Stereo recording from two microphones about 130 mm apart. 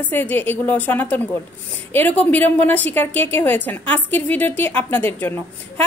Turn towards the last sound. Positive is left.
turn(degrees=15)  # may be behind; listen again after turning